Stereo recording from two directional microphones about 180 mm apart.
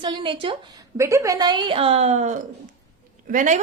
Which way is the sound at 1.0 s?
15° right (ahead or behind).